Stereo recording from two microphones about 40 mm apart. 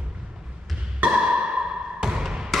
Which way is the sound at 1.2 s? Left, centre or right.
Right.